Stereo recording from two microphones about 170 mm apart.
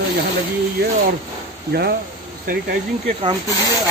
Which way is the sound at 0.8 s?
65° right (ahead or behind).